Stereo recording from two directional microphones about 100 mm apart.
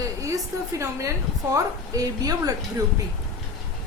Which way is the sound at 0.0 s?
35° right (ahead or behind).